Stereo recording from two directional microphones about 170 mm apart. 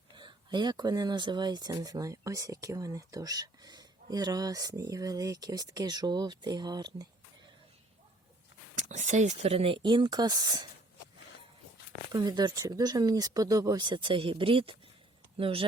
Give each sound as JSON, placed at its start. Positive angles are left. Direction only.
{"t": 0.2, "sound": "speech", "side_deg": -25}
{"t": 8.7, "sound": "speech", "side_deg": -45}
{"t": 12.1, "sound": "speech", "side_deg": -25}